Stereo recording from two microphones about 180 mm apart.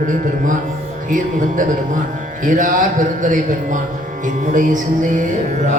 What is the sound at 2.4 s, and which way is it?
Speech, 45° right (ahead or behind).